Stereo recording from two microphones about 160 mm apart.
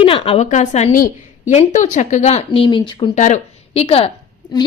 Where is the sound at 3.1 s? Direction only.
50° left (ahead or behind).